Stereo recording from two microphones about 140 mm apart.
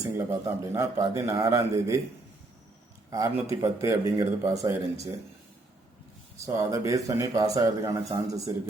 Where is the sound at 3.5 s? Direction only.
25° right (ahead or behind).